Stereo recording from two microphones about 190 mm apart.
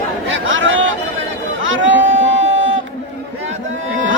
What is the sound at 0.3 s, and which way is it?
Chatter, 80° right.